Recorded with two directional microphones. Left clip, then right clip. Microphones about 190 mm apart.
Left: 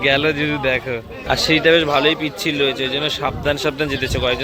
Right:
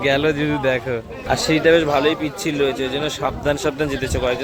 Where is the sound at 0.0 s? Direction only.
15° right (ahead or behind).